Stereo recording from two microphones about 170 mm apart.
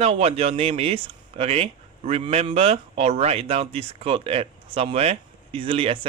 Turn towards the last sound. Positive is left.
turn(degrees=-30)  # may be behind; listen again after turning